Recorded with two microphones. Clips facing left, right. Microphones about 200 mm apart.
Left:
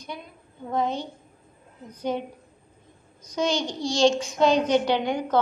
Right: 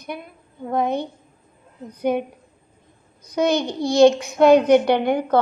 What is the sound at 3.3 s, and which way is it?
A child's voice, 60° right (ahead or behind).